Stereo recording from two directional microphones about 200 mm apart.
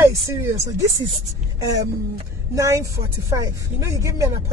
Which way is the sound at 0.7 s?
20° right (ahead or behind).